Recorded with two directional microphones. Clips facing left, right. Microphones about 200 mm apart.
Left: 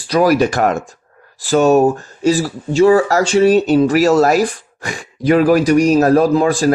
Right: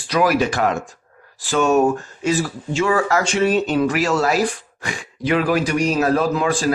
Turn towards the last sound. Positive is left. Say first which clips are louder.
# left 6 dB
turn(degrees=40)  # may be behind; listen again after turning